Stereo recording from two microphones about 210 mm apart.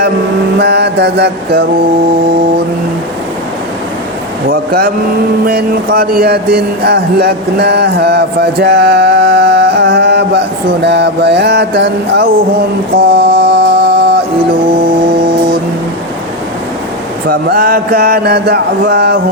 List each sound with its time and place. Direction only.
0.6 s speech: 50° right (ahead or behind)
4.4 s speech: 45° right (ahead or behind)
13.1 s mantra: 55° right (ahead or behind)
17.2 s speech: 45° right (ahead or behind)